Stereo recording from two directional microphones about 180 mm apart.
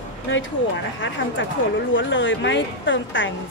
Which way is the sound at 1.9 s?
90° left.